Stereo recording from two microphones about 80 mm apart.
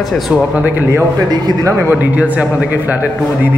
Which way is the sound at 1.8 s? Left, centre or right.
Centre.